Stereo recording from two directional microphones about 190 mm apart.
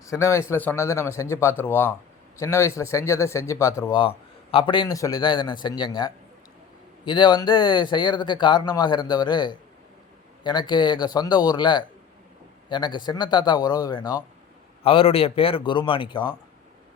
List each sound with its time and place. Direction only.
0.0 s a man's voice: 15° left (ahead or behind)